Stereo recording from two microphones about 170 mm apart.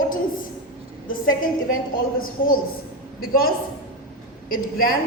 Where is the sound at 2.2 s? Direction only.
55° left (ahead or behind).